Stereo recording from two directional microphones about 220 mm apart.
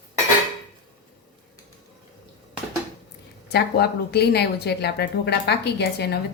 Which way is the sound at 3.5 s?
45° left (ahead or behind).